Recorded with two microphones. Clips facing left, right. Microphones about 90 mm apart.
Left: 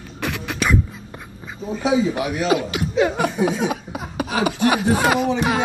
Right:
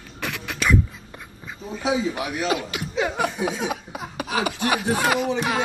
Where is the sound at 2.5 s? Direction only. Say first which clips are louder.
Left 6 dB; 5° left (ahead or behind).